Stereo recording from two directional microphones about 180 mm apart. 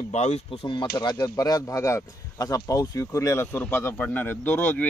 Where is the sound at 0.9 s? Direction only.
20° left (ahead or behind).